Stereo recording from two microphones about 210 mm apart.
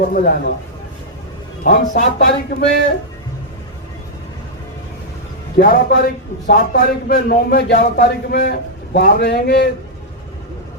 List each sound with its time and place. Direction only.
0.0 s a man's voice: 45° left (ahead or behind)
1.6 s a man's voice: 45° left (ahead or behind)
5.5 s a man's voice: 45° left (ahead or behind)